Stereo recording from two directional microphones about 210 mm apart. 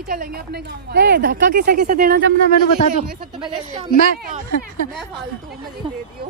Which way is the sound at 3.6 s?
35° right (ahead or behind).